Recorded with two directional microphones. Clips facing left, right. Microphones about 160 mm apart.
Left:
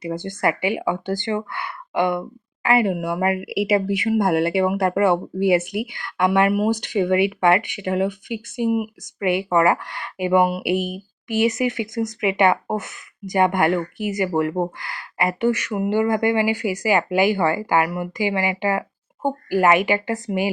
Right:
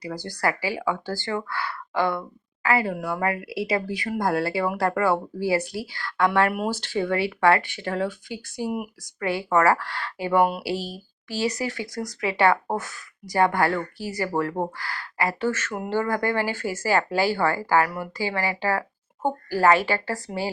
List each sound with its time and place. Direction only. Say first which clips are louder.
0.0 s speech: left 4 dB; 20° left (ahead or behind)